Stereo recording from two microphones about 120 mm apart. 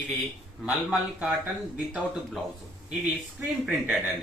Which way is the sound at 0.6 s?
10° right (ahead or behind).